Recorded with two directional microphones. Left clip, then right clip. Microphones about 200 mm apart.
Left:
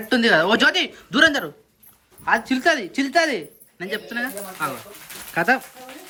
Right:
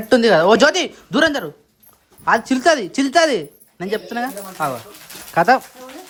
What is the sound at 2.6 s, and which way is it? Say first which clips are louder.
Speech: right 4 dB; 45° right (ahead or behind).